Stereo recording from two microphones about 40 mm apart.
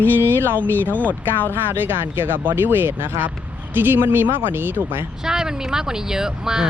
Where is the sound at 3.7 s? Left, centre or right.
Right.